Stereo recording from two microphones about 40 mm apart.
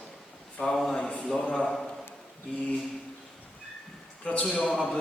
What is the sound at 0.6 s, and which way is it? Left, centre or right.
Speech, left.